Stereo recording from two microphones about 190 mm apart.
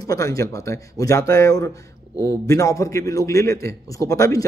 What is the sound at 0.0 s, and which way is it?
A man's voice, 20° left (ahead or behind).